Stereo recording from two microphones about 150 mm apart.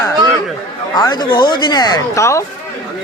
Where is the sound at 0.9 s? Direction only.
30° left (ahead or behind).